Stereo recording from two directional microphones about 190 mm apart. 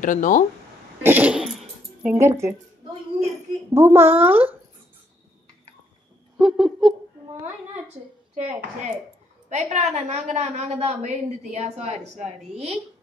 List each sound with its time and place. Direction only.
0.0 s speech: 40° left (ahead or behind)
1.0 s a sound: 10° right (ahead or behind)
2.1 s speech: 15° right (ahead or behind)
3.7 s speech: 10° right (ahead or behind)
6.3 s a sound: 5° right (ahead or behind)
9.5 s a woman's voice: 35° right (ahead or behind)